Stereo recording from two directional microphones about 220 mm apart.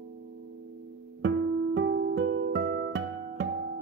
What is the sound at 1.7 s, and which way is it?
Music, 50° right (ahead or behind).